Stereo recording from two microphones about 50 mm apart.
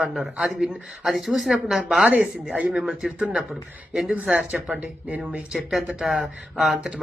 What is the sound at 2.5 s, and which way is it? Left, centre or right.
Speech, right.